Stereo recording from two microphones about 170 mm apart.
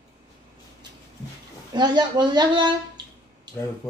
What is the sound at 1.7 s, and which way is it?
Speech, 25° right (ahead or behind).